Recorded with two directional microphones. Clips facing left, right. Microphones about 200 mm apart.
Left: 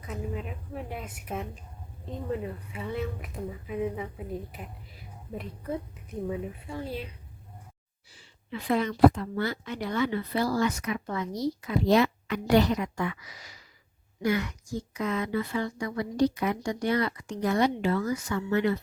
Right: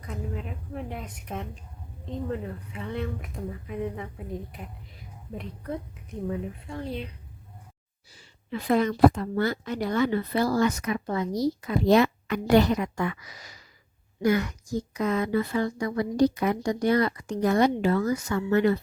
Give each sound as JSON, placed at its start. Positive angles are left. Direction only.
{"t": 0.0, "sound": "speech", "side_deg": 5}
{"t": 8.1, "sound": "a woman's voice", "side_deg": -40}